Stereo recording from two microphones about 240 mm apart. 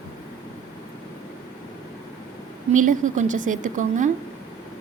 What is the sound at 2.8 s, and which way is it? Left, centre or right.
A woman's voice, right.